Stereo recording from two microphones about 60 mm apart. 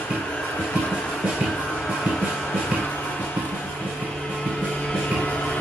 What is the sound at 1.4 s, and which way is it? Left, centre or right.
Music, centre.